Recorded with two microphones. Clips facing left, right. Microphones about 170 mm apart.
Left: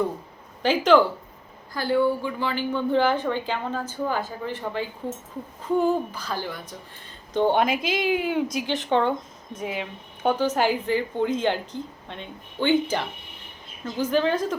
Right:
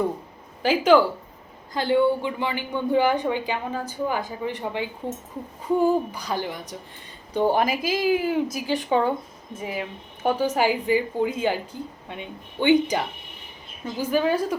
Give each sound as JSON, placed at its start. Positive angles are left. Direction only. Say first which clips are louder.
{"t": 0.6, "sound": "a woman's voice", "louder": "right 1 dB", "side_deg": -5}
{"t": 1.7, "sound": "a woman's voice", "louder": "right 2 dB", "side_deg": -20}
{"t": 7.3, "sound": "a woman's voice", "louder": "even", "side_deg": -5}
{"t": 14.0, "sound": "a woman's voice", "louder": "even", "side_deg": -10}